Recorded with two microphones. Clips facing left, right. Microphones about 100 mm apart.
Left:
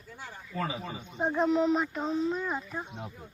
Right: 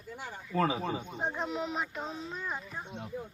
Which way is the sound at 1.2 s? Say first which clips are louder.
Left 10 dB; centre (ahead or behind).